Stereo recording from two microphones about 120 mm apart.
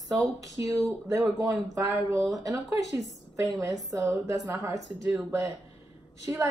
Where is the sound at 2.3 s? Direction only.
30° right (ahead or behind).